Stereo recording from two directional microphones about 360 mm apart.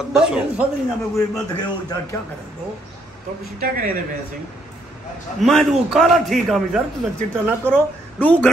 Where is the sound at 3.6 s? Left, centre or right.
Right.